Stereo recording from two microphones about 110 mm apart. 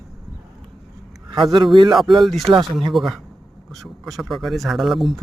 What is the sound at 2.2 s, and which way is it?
Speech, centre (ahead or behind).